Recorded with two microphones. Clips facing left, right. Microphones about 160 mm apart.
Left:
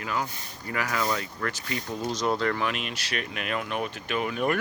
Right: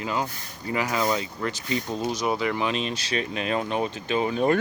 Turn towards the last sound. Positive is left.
turn(degrees=-30)  # may be behind; listen again after turning